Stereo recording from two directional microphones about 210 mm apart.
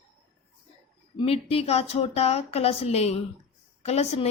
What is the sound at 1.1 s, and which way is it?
A woman's voice, 30° left (ahead or behind).